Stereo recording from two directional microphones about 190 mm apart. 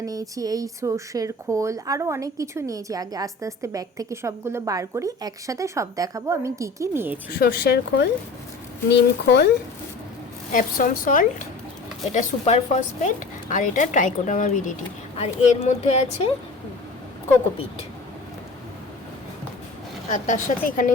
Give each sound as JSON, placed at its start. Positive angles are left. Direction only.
{"t": 0.0, "sound": "speech", "side_deg": -20}
{"t": 7.3, "sound": "speech", "side_deg": 60}
{"t": 10.5, "sound": "speech", "side_deg": 45}
{"t": 12.1, "sound": "speech", "side_deg": 35}
{"t": 20.1, "sound": "speech", "side_deg": 40}